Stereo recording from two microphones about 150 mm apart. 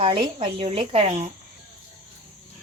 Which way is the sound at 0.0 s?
35° right (ahead or behind).